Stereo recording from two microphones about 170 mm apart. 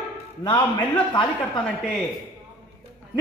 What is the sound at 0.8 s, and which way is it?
Speech, 30° left (ahead or behind).